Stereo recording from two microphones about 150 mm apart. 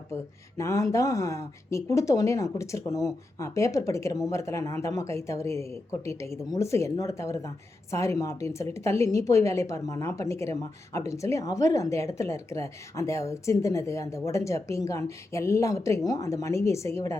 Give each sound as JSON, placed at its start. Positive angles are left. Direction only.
{"t": 0.1, "sound": "speech", "side_deg": 20}